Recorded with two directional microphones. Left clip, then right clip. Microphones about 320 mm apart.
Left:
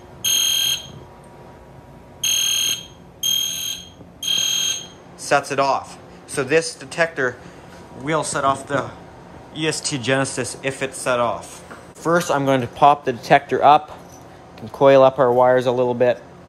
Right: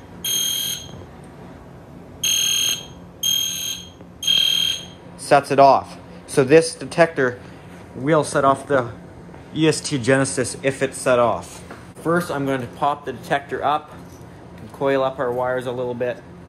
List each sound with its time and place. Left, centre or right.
2.2 s fire alarm: centre
4.3 s fire alarm: left
5.2 s speech: centre; by 15.9 s left